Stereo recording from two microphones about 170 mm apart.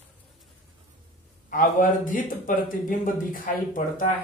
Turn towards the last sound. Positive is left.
turn(degrees=50)  # may be behind; listen again after turning